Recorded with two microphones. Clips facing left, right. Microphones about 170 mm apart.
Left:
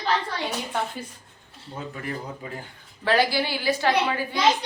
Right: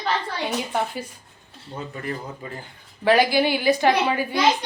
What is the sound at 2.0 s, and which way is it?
Speech, 5° left (ahead or behind).